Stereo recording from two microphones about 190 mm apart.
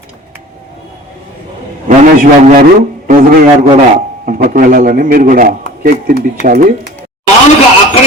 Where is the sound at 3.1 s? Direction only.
50° right (ahead or behind).